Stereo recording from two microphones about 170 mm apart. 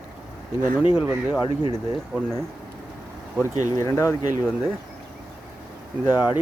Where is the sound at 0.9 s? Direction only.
10° right (ahead or behind).